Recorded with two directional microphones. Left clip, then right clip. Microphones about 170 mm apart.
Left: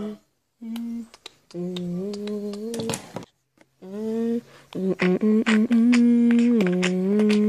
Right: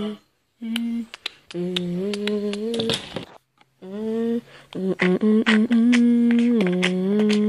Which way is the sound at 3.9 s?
5° left (ahead or behind).